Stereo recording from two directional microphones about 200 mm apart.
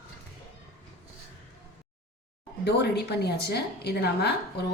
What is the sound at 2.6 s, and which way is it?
A woman's voice, 55° left (ahead or behind).